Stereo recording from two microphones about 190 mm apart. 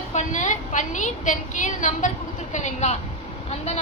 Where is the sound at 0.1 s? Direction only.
40° left (ahead or behind).